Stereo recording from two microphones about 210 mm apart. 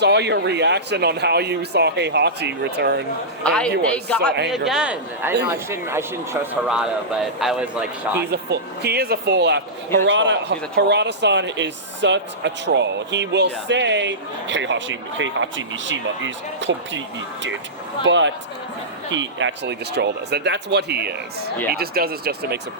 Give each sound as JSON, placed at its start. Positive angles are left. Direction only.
{"t": 0.0, "sound": "speech", "side_deg": -55}
{"t": 3.4, "sound": "speech", "side_deg": 5}
{"t": 8.3, "sound": "speech", "side_deg": -50}
{"t": 18.0, "sound": "speech", "side_deg": -60}